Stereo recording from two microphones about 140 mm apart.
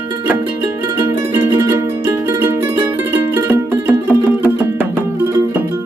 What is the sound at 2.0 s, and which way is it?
Music, 20° right (ahead or behind).